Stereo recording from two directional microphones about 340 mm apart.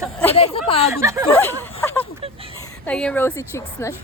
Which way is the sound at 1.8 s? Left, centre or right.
Centre.